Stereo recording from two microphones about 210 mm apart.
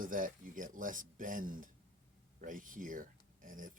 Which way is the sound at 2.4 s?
40° right (ahead or behind).